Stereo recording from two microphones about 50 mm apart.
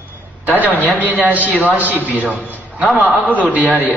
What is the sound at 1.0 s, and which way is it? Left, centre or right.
A man's voice, right.